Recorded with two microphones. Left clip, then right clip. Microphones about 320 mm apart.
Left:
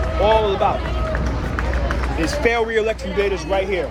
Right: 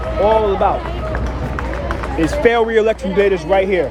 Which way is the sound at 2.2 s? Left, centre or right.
Right.